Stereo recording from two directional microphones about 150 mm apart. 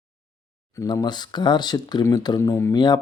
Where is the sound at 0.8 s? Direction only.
25° left (ahead or behind).